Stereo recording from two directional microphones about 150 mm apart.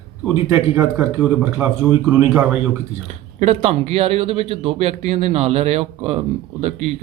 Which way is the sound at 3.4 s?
45° right (ahead or behind).